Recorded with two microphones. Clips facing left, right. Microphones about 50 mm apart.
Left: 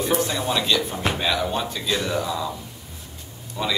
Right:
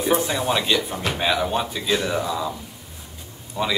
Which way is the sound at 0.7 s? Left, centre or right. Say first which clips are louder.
Even; centre.